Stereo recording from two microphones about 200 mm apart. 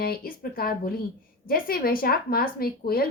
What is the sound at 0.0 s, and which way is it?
A woman's voice, 45° left (ahead or behind).